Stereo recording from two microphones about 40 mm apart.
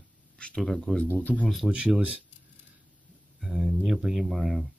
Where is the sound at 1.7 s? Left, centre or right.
Right.